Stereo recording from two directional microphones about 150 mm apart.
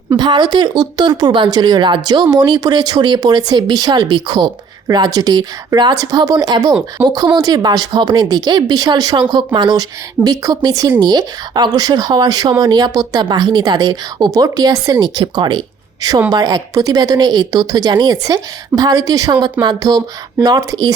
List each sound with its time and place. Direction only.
0.1 s speech: 30° right (ahead or behind)